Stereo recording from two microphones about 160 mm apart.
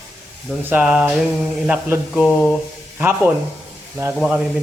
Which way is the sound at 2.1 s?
Centre (ahead or behind).